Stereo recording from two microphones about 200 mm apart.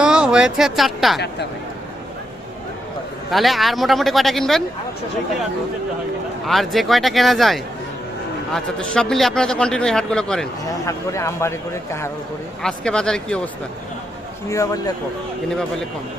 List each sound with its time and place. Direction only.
0.0 s speech: 5° right (ahead or behind)
3.2 s a man's voice: centre (ahead or behind)
6.5 s a man's voice: centre (ahead or behind)
10.7 s a man's voice: 15° left (ahead or behind)
14.5 s speech: 15° left (ahead or behind)